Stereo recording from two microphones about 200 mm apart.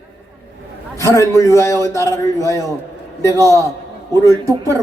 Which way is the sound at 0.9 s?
15° left (ahead or behind).